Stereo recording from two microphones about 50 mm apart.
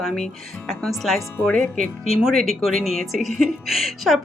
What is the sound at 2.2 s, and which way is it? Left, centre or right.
Speech, centre.